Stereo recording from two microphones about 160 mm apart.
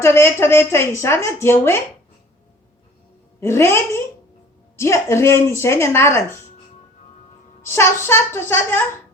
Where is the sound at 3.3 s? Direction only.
15° left (ahead or behind).